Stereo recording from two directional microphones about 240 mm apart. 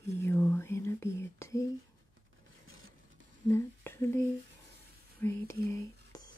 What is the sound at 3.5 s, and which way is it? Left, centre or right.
Speech, centre.